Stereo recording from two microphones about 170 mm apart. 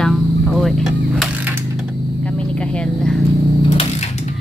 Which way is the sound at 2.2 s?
5° left (ahead or behind).